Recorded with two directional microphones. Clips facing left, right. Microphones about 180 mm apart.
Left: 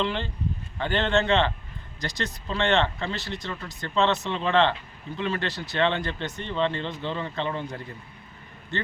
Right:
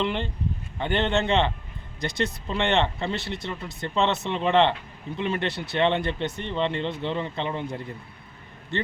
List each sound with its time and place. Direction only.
0.0 s speech: 20° right (ahead or behind)